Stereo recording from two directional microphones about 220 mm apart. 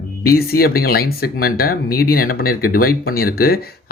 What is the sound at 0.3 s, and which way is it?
Speech, 45° left (ahead or behind).